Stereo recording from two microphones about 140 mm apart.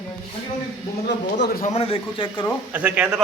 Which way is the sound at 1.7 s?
45° left (ahead or behind).